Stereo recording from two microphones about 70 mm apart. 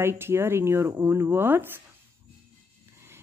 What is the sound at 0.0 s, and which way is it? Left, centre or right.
A woman's voice, right.